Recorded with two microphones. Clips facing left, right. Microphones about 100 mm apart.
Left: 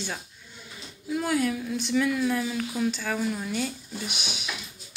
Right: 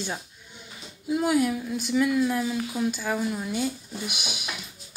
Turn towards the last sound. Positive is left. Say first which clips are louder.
# right 1 dB
turn(degrees=-15)  # may be behind; listen again after turning